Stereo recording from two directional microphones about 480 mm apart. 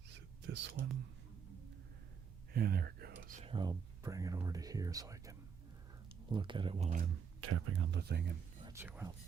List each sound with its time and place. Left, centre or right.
0.4 s speech: right
2.5 s speech: centre
7.4 s speech: right
8.6 s speech: centre